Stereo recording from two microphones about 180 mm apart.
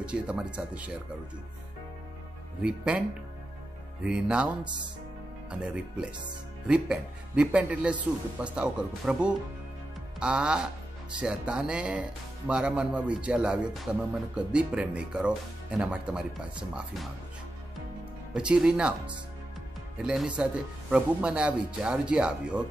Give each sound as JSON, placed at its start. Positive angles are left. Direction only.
{"t": 0.0, "sound": "speech", "side_deg": -5}
{"t": 2.6, "sound": "speech", "side_deg": -5}
{"t": 4.0, "sound": "speech", "side_deg": -5}
{"t": 5.5, "sound": "speech", "side_deg": -5}
{"t": 18.3, "sound": "speech", "side_deg": -5}